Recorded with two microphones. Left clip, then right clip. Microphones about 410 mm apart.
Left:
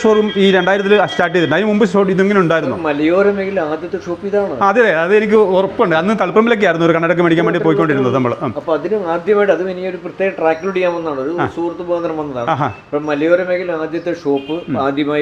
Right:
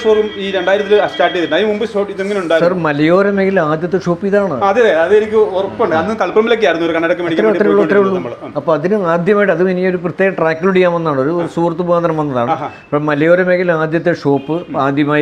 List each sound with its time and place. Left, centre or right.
0.0 s speech: left
2.8 s speech: right
4.6 s speech: left
8.7 s speech: right
13.1 s a man's voice: right
14.8 s speech: right